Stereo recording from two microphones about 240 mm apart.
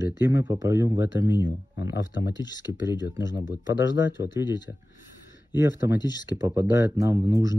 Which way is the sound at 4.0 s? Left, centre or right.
Left.